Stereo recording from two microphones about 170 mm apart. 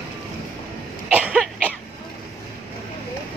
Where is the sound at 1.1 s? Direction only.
5° right (ahead or behind).